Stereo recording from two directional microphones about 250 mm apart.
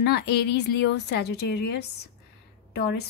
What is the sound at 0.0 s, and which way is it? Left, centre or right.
A woman's voice, left.